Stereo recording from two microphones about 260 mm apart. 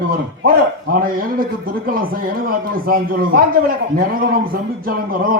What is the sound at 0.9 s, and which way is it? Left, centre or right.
A man's voice, right.